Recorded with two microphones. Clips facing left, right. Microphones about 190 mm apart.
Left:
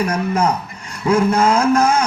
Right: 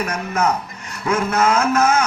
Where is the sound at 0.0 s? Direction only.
30° left (ahead or behind).